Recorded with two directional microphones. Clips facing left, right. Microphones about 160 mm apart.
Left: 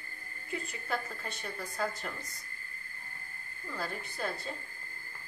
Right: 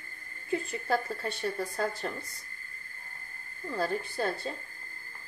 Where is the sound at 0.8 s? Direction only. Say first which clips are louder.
Right 7 dB; 35° right (ahead or behind).